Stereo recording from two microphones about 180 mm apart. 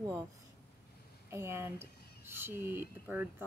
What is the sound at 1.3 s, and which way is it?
Speech, 15° right (ahead or behind).